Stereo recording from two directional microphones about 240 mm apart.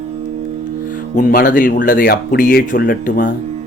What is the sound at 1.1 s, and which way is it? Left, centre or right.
Speech, left.